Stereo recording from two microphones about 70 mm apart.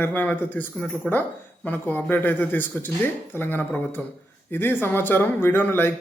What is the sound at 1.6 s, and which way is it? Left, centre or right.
A man's voice, left.